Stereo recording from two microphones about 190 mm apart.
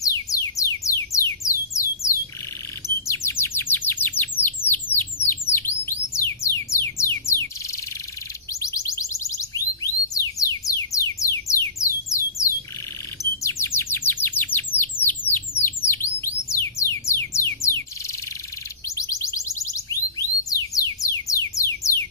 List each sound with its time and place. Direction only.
0.0 s music: 15° left (ahead or behind)
3.1 s bird: 15° left (ahead or behind)
6.1 s music: 15° left (ahead or behind)
8.5 s music: 15° left (ahead or behind)
11.8 s a sound: 15° left (ahead or behind)
13.2 s chirp: 15° left (ahead or behind)
16.9 s music: 15° left (ahead or behind)
18.9 s music: 15° left (ahead or behind)